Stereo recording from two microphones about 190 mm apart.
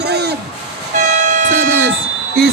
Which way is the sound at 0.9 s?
40° right (ahead or behind).